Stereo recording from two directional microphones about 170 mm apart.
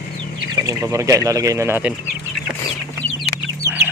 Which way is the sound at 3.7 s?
10° right (ahead or behind).